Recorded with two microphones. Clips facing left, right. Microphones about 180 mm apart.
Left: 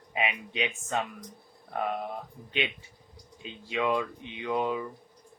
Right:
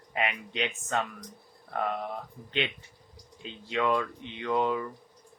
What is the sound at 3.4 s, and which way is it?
Speech, 15° left (ahead or behind).